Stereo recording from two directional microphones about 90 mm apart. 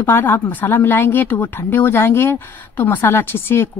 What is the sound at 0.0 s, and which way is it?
Speech, 25° left (ahead or behind).